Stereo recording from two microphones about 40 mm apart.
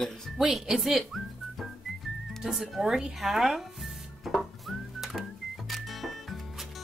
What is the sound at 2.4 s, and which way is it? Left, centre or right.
Speech, centre.